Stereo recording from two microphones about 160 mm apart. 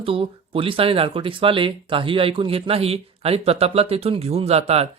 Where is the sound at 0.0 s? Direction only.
35° right (ahead or behind).